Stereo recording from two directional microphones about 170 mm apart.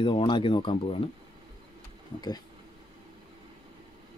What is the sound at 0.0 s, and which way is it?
Speech, 30° left (ahead or behind).